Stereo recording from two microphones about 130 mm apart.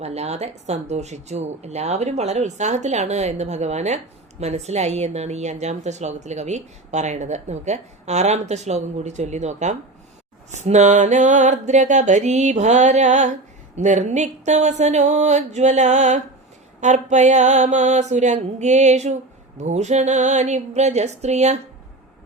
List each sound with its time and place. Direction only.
0.0 s speech: 55° right (ahead or behind)